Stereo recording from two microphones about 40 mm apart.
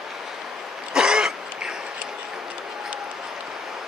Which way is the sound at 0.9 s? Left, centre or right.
Centre.